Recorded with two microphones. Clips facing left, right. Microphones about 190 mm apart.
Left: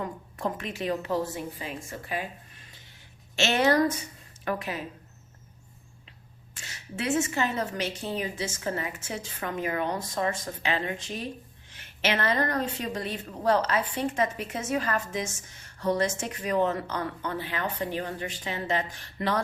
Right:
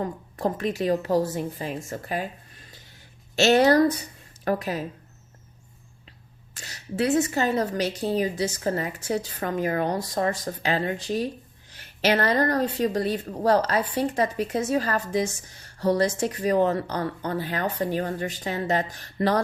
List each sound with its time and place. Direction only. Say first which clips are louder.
0.0 s a woman's voice: right 5 dB; 35° right (ahead or behind)
3.3 s a woman's voice: right 6 dB; 40° right (ahead or behind)
6.6 s a woman's voice: right 8 dB; 40° right (ahead or behind)